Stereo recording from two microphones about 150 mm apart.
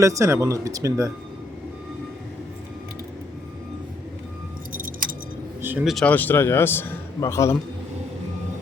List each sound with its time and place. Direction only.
0.0 s speech: 20° right (ahead or behind)
5.6 s a sound: 10° right (ahead or behind)
5.9 s a man's voice: 5° left (ahead or behind)